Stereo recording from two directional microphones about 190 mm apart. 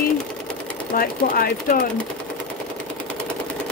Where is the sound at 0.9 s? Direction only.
50° left (ahead or behind).